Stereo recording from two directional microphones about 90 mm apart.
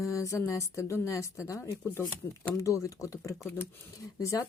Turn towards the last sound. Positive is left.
turn(degrees=40)  # may be behind; listen again after turning